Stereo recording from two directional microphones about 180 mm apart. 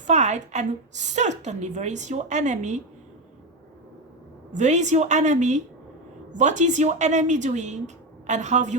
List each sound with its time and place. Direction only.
0.1 s a woman's voice: 40° right (ahead or behind)
4.5 s a woman's voice: 40° right (ahead or behind)